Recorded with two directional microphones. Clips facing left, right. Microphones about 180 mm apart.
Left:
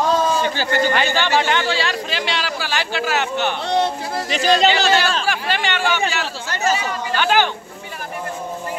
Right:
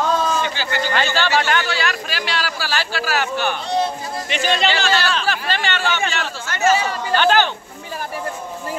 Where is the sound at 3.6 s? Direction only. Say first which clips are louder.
Left 2 dB; 70° left (ahead or behind).